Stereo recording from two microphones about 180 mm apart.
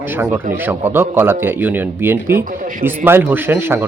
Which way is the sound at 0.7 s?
10° right (ahead or behind).